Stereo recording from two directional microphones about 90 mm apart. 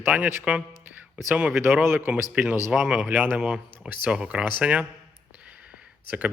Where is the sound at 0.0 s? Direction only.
15° right (ahead or behind).